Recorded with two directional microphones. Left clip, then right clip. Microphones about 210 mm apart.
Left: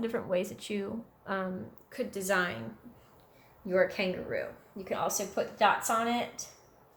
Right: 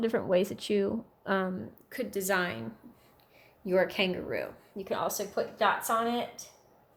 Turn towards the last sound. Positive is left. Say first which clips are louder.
# right 1 dB
turn(degrees=-25)  # may be behind; listen again after turning